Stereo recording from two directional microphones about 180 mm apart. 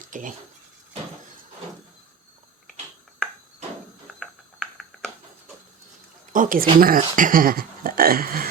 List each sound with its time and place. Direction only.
0.1 s speech: 45° right (ahead or behind)
4.2 s a sound: centre (ahead or behind)
6.3 s speech: 50° right (ahead or behind)